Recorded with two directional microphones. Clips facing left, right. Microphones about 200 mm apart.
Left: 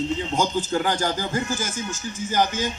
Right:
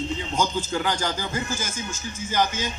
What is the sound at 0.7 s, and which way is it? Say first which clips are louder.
A man's voice: left 3 dB; 45° left (ahead or behind).